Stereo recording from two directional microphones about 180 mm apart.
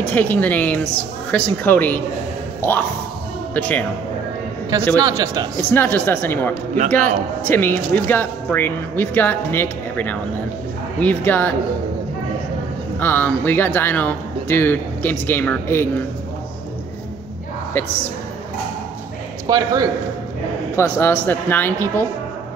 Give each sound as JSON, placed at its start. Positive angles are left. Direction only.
{"t": 0.0, "sound": "speech", "side_deg": 10}
{"t": 3.5, "sound": "speech", "side_deg": 10}
{"t": 4.7, "sound": "a man's voice", "side_deg": -20}
{"t": 5.6, "sound": "speech", "side_deg": 10}
{"t": 13.0, "sound": "speech", "side_deg": 10}
{"t": 19.4, "sound": "a man's voice", "side_deg": -20}
{"t": 20.7, "sound": "speech", "side_deg": 15}